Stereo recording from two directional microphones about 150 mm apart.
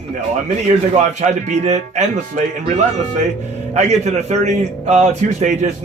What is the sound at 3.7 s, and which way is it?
A man's voice, 50° right (ahead or behind).